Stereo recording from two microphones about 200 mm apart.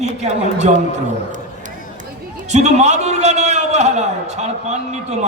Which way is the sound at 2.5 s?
35° right (ahead or behind).